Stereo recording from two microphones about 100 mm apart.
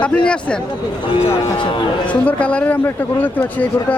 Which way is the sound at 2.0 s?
15° left (ahead or behind).